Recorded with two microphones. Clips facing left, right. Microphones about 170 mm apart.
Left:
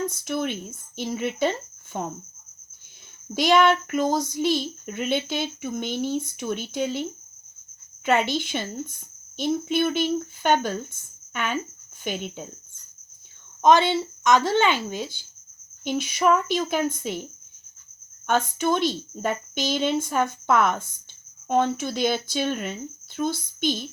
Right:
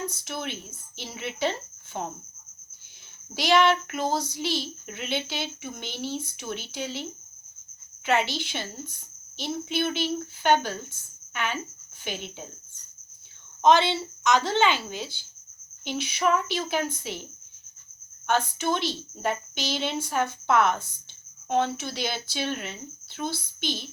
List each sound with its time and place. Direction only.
0.1 s speech: 50° left (ahead or behind)
3.3 s speech: 50° left (ahead or behind)
8.0 s speech: 50° left (ahead or behind)
13.6 s speech: 45° left (ahead or behind)
18.3 s speech: 45° left (ahead or behind)